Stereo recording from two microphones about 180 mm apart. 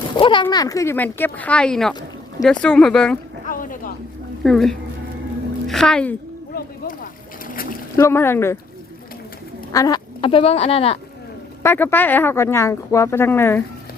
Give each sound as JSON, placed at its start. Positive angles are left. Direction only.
{"t": 0.2, "sound": "speech", "side_deg": 25}
{"t": 3.4, "sound": "a sound", "side_deg": 50}
{"t": 4.4, "sound": "speech", "side_deg": 0}
{"t": 6.6, "sound": "boat", "side_deg": 50}
{"t": 7.9, "sound": "speech", "side_deg": 15}
{"t": 9.7, "sound": "speech", "side_deg": 20}
{"t": 11.6, "sound": "speech", "side_deg": 10}